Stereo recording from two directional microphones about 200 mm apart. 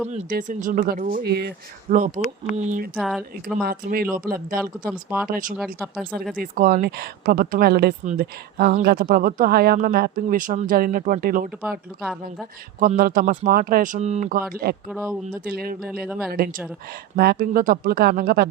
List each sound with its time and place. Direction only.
0.1 s a woman's voice: 45° right (ahead or behind)
1.9 s speech: 35° right (ahead or behind)
2.9 s speech: centre (ahead or behind)
3.6 s a woman's voice: 50° right (ahead or behind)
4.9 s speech: 5° right (ahead or behind)
5.3 s a woman's voice: 40° right (ahead or behind)
13.0 s a woman's voice: 45° right (ahead or behind)
14.5 s a woman's voice: 50° right (ahead or behind)
14.8 s speech: 5° right (ahead or behind)
15.4 s a woman's voice: 50° right (ahead or behind)
15.9 s speech: 5° right (ahead or behind)
16.3 s a woman's voice: 50° right (ahead or behind)